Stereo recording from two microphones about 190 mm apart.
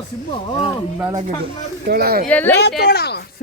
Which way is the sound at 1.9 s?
55° right (ahead or behind).